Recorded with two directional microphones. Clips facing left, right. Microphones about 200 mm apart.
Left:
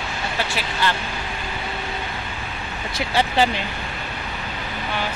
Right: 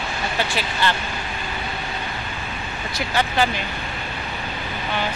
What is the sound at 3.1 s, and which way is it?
Speech, 30° left (ahead or behind).